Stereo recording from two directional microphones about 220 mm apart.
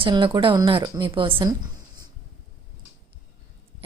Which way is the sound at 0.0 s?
20° right (ahead or behind).